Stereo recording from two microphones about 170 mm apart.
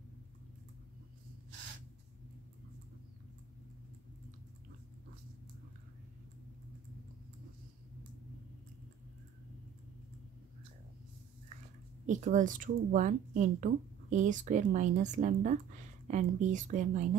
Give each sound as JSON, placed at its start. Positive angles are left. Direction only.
{"t": 12.1, "sound": "speech", "side_deg": -50}